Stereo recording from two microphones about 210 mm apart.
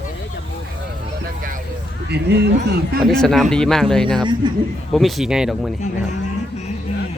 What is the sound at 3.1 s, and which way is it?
Speech, centre (ahead or behind).